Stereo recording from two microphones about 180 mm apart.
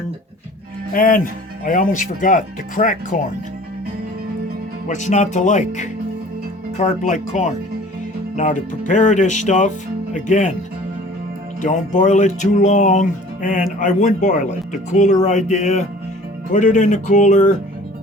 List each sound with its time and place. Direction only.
0.9 s speech: 50° left (ahead or behind)
4.9 s speech: 40° left (ahead or behind)
11.6 s speech: 45° left (ahead or behind)